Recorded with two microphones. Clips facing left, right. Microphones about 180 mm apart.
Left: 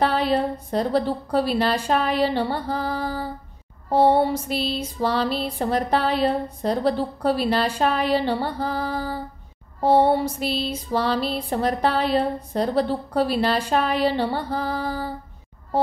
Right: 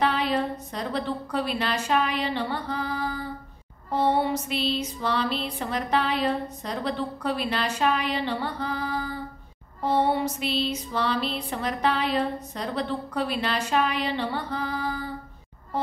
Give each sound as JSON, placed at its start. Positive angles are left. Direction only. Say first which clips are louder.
{"t": 0.0, "sound": "a woman's voice", "louder": "left 4 dB", "side_deg": 35}
{"t": 3.9, "sound": "music", "louder": "left 6 dB", "side_deg": 35}